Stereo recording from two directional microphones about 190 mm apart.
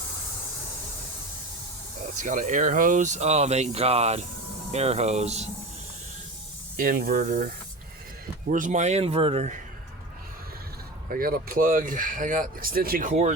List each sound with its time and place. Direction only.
2.2 s speech: 40° right (ahead or behind)
6.7 s speech: 50° right (ahead or behind)
11.1 s speech: 50° right (ahead or behind)